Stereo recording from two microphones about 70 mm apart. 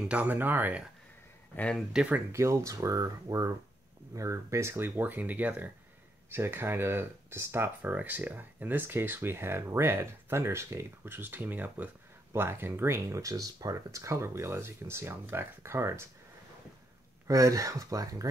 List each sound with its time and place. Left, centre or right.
0.1 s speech: right
1.5 s speech: left
2.3 s speech: right
17.3 s speech: right